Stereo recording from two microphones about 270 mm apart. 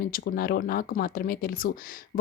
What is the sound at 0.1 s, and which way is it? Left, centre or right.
Speech, left.